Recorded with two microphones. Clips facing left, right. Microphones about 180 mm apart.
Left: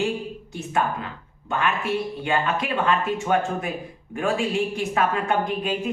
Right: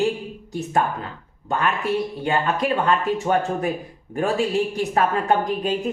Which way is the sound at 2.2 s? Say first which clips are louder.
Right 2 dB; 40° right (ahead or behind).